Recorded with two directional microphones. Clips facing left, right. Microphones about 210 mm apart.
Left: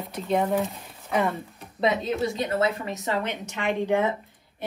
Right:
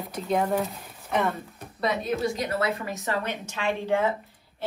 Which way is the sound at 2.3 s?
25° left (ahead or behind).